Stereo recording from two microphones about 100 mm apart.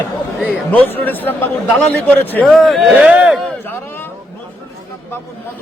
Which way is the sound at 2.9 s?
15° right (ahead or behind).